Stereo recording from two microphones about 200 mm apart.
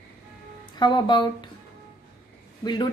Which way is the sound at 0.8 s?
20° left (ahead or behind).